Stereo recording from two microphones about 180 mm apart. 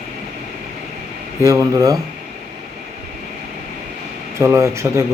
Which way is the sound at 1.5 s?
20° right (ahead or behind).